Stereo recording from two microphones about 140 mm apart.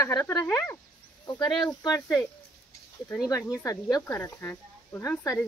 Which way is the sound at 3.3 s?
25° left (ahead or behind).